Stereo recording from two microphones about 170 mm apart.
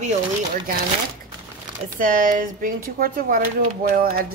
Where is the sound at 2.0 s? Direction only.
50° right (ahead or behind).